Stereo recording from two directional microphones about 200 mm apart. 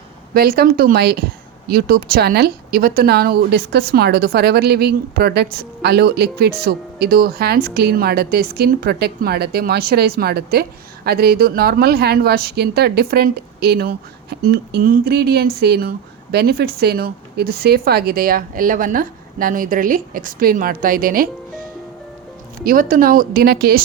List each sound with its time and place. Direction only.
0.3 s speech: 50° right (ahead or behind)
22.6 s speech: 45° right (ahead or behind)